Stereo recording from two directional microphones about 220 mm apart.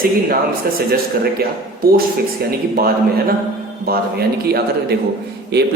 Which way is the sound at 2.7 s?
45° right (ahead or behind).